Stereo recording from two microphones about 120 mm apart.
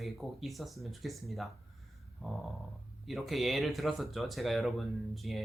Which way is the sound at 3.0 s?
Centre (ahead or behind).